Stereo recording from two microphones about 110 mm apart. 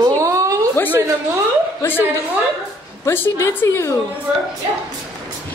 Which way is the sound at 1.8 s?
20° left (ahead or behind).